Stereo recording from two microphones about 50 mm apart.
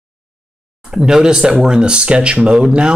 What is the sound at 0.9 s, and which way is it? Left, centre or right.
Speech, centre.